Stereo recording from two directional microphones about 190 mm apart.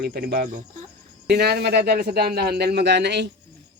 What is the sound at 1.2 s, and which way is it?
Speech, 60° right (ahead or behind).